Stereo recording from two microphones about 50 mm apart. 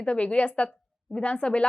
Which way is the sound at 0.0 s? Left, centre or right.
Left.